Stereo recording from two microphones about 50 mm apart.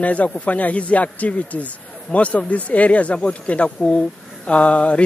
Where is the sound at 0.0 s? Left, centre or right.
Left.